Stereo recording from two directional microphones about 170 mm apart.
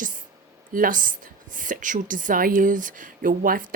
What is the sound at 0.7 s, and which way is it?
Speech, 55° right (ahead or behind).